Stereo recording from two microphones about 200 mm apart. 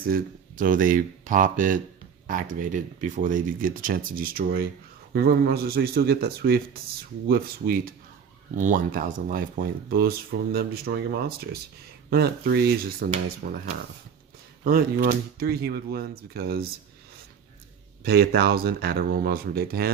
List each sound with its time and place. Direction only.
0.0 s speech: 45° right (ahead or behind)
14.6 s speech: 45° right (ahead or behind)
18.0 s speech: 50° right (ahead or behind)